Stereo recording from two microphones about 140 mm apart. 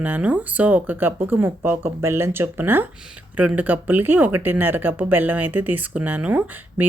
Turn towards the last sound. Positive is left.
turn(degrees=-10)  # may be behind; listen again after turning